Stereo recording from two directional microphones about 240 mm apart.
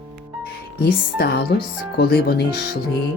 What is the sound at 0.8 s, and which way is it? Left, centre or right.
Speech, left.